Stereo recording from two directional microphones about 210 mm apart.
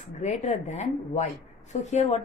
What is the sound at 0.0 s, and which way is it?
A woman's voice, 35° left (ahead or behind).